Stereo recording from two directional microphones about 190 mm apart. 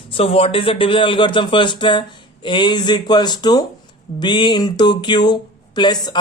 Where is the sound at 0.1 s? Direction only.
30° left (ahead or behind).